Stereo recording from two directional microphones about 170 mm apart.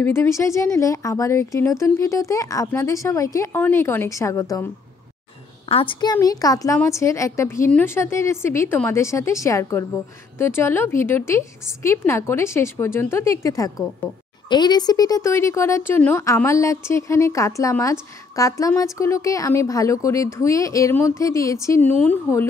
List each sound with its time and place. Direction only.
0.0 s speech: 15° left (ahead or behind)
5.7 s speech: 30° left (ahead or behind); by 22.5 s 10° left (ahead or behind)